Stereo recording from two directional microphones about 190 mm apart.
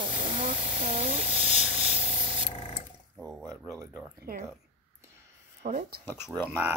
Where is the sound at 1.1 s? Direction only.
40° left (ahead or behind).